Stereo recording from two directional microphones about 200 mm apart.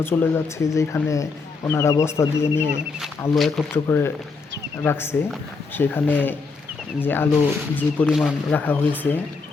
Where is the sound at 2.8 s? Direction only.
Centre (ahead or behind).